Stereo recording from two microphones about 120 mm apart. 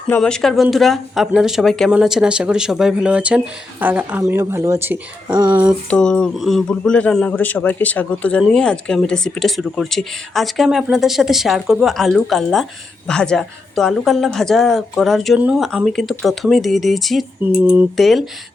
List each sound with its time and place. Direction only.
0.2 s speech: 5° left (ahead or behind); by 4.9 s 25° right (ahead or behind)
5.3 s speech: 35° right (ahead or behind)
5.9 s a man's voice: 5° left (ahead or behind)
15.4 s speech: 10° right (ahead or behind)
15.6 s speech: centre (ahead or behind)
17.4 s speech: 15° right (ahead or behind)
17.9 s speech: centre (ahead or behind)